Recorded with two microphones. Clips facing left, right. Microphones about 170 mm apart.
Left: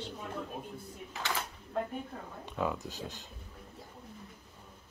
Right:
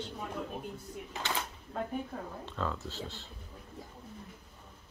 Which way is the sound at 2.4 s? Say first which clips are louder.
Left 5 dB; 15° left (ahead or behind).